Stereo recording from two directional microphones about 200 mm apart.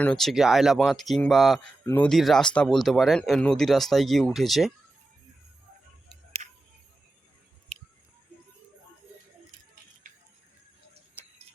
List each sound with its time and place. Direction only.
0.0 s speech: 5° left (ahead or behind)
6.4 s music: 40° right (ahead or behind)